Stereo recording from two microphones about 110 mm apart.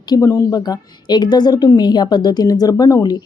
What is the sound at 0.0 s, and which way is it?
A woman's voice, 35° left (ahead or behind).